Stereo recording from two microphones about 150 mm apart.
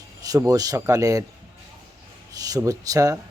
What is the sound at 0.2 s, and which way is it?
Speech, 25° right (ahead or behind).